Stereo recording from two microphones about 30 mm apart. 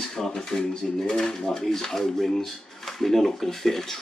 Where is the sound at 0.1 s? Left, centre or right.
Centre.